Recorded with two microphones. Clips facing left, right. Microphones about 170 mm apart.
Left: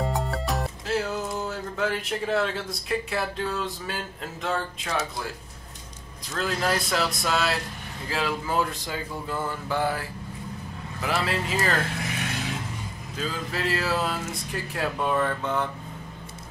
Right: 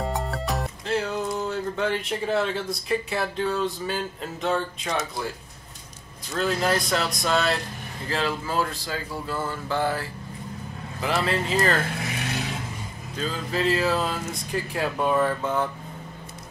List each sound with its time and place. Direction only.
0.0 s music: centre (ahead or behind)
6.3 s speech: centre (ahead or behind)
8.5 s speech: 15° left (ahead or behind)
13.2 s speech: 5° left (ahead or behind)